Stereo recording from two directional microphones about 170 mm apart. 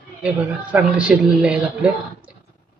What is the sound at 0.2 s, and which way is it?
Dishes, 5° right (ahead or behind).